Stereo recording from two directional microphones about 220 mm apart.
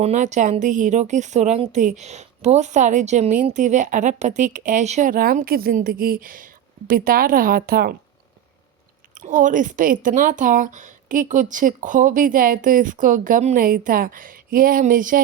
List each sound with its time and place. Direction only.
0.0 s speech: 30° right (ahead or behind)
9.1 s speech: 35° right (ahead or behind)